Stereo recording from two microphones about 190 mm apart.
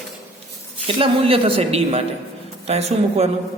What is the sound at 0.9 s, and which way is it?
A woman's voice, 30° right (ahead or behind).